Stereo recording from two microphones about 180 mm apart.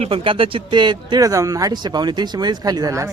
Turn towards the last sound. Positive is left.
turn(degrees=-20)  # may be behind; listen again after turning